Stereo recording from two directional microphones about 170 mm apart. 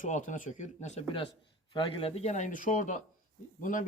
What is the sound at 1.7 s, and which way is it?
Speech, 30° left (ahead or behind).